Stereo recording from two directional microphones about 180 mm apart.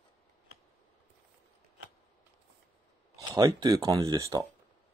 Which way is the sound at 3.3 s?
20° right (ahead or behind).